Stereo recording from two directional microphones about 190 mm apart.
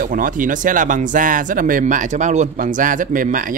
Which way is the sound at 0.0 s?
45° right (ahead or behind).